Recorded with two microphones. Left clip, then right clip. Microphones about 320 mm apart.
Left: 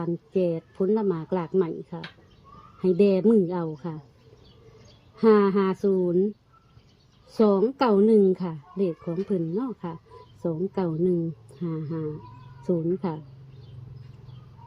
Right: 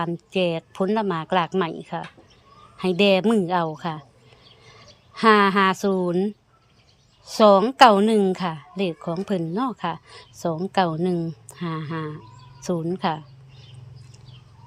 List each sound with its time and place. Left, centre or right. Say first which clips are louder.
0.0 s speech: right 2 dB; centre
5.1 s speech: right 3 dB; centre
7.3 s speech: right 8 dB; centre